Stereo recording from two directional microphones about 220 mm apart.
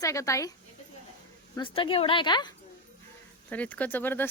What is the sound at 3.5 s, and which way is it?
Speech, 5° left (ahead or behind).